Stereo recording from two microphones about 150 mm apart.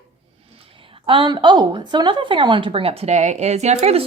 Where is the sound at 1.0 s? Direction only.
35° right (ahead or behind).